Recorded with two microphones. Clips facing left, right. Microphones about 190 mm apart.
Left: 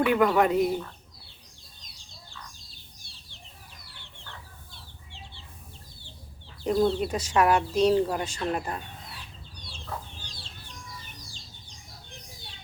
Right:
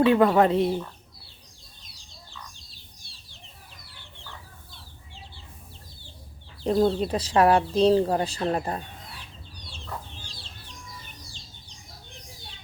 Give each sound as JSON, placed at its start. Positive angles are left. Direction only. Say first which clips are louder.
{"t": 0.0, "sound": "speech", "louder": "right 3 dB", "side_deg": -25}
{"t": 6.7, "sound": "speech", "louder": "right 2 dB", "side_deg": -30}